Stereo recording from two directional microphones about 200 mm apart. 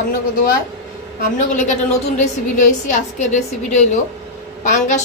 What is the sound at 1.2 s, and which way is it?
A woman's voice, 35° left (ahead or behind).